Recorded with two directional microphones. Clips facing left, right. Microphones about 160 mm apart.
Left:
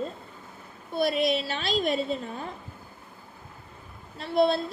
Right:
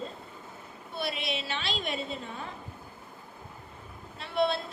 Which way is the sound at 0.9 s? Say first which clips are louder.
Left 9 dB; 40° left (ahead or behind).